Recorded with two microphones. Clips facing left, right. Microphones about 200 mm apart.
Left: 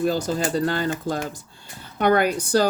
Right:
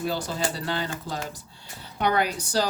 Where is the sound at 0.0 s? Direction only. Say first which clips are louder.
Left 6 dB; 45° left (ahead or behind).